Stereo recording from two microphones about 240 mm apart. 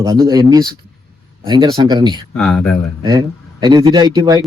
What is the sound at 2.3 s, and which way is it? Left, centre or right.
Speech, centre.